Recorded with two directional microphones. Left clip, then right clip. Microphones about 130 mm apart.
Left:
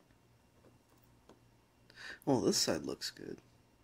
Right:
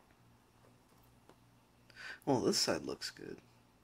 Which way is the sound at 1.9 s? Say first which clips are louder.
Left 1 dB; 30° left (ahead or behind).